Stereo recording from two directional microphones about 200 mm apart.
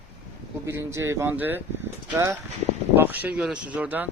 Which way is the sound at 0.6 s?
15° right (ahead or behind).